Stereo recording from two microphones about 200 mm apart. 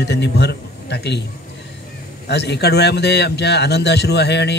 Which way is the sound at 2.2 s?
55° left (ahead or behind).